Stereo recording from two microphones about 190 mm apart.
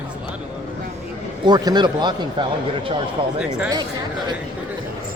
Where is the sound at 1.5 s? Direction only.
20° right (ahead or behind).